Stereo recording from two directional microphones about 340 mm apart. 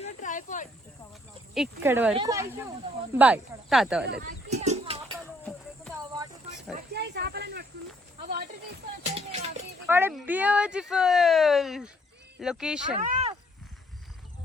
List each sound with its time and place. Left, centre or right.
0.0 s cricket: left
1.5 s speech: centre
4.0 s children playing: right
5.4 s cricket: centre
6.7 s snake: right
9.1 s speech: centre
9.8 s speech: centre
13.0 s speech: centre